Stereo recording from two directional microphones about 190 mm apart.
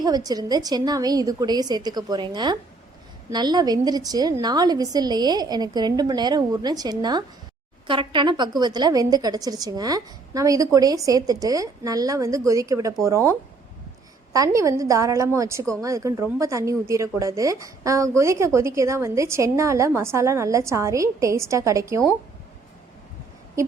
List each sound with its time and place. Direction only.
0.0 s a woman's voice: 20° right (ahead or behind)
14.3 s a woman's voice: 15° right (ahead or behind)